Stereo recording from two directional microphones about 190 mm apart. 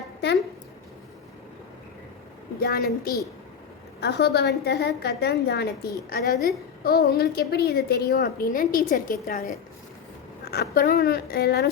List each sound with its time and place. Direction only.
2.6 s a woman's voice: 55° left (ahead or behind)